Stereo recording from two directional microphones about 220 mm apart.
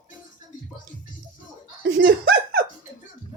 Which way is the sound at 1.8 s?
45° right (ahead or behind).